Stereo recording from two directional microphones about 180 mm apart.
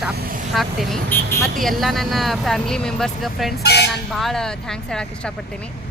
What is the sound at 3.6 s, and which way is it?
Speech, 65° left (ahead or behind).